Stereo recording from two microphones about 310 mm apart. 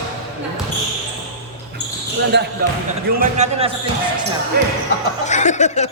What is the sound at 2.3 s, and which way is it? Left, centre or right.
Speech, right.